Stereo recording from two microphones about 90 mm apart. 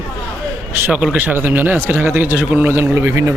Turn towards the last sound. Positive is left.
turn(degrees=-25)  # may be behind; listen again after turning